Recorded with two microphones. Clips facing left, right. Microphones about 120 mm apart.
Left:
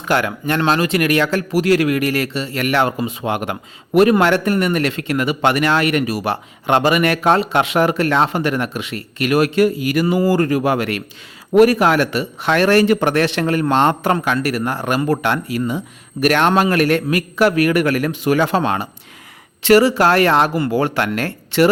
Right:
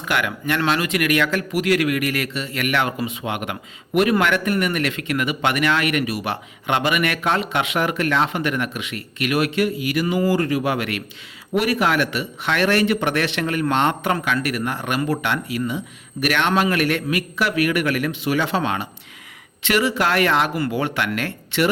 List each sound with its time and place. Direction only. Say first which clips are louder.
0.1 s speech: left 4 dB; 35° left (ahead or behind)